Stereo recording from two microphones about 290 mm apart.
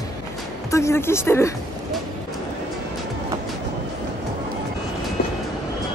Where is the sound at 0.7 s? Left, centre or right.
Centre.